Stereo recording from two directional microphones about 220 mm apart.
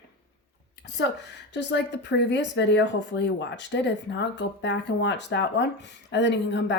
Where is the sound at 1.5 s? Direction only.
55° left (ahead or behind).